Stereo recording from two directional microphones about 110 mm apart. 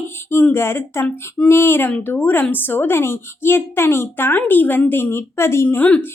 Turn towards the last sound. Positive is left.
turn(degrees=10)  # may be behind; listen again after turning